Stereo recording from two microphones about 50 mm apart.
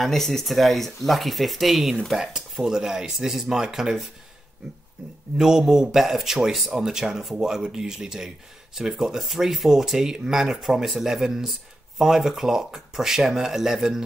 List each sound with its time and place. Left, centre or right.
0.0 s a man's voice: centre
5.4 s a man's voice: centre